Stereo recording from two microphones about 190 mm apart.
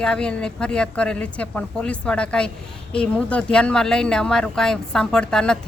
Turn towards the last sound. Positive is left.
turn(degrees=5)  # may be behind; listen again after turning